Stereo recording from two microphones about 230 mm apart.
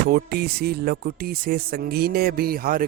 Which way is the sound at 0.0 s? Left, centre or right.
Right.